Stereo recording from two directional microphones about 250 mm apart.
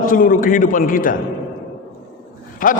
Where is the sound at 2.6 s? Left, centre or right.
Left.